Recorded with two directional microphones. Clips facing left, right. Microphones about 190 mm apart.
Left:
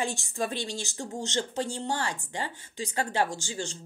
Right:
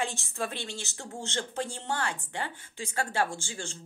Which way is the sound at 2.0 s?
55° right (ahead or behind).